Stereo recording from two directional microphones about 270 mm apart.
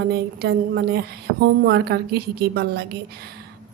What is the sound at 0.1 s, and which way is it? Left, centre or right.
Speech, right.